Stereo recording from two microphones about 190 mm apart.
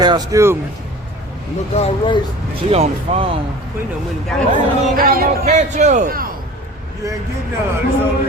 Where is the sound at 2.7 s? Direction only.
35° right (ahead or behind).